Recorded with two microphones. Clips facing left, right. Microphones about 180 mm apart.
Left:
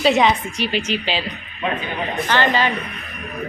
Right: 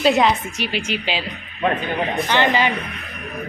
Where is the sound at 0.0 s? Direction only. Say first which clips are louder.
Even; centre (ahead or behind).